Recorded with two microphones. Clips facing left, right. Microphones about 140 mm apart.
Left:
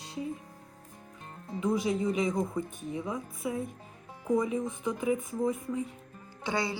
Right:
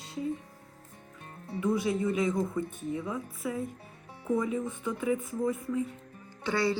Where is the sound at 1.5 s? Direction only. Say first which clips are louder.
Even; 20° left (ahead or behind).